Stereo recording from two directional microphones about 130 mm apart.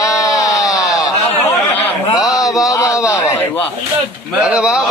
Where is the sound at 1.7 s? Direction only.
15° left (ahead or behind).